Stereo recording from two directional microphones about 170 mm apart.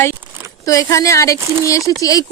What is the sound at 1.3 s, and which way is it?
Speech, 15° right (ahead or behind).